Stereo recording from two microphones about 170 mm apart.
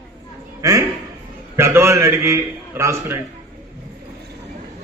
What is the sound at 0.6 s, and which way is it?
A man's voice, 20° right (ahead or behind).